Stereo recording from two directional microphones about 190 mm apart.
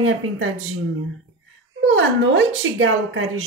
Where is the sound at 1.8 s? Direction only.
80° right.